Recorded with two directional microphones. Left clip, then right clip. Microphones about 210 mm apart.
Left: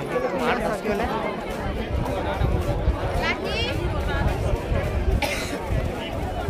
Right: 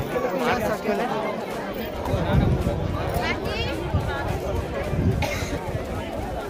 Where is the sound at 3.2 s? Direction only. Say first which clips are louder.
Left 3 dB; 40° left (ahead or behind).